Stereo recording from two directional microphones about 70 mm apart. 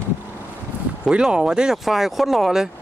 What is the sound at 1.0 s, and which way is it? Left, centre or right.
Speech, centre.